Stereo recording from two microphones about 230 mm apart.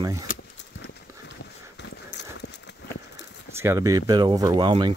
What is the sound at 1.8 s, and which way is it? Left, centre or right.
Horse, left.